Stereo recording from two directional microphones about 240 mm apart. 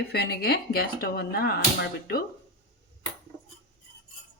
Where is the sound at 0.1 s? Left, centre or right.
Left.